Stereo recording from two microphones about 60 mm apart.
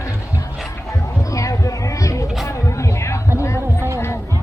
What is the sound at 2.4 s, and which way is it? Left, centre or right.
Music, left.